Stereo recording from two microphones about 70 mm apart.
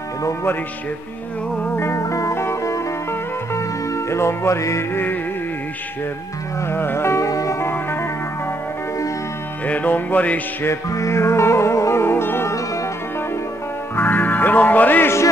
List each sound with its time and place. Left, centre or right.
0.2 s speech: left
1.5 s music: centre
1.8 s music: left
4.9 s music: left
6.7 s music: left
7.6 s music: left
9.7 s music: left
10.9 s music: left
13.9 s music: left